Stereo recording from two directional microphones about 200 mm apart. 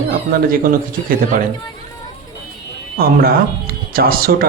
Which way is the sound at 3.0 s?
50° right (ahead or behind).